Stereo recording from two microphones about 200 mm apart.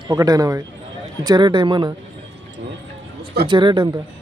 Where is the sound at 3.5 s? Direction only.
25° right (ahead or behind).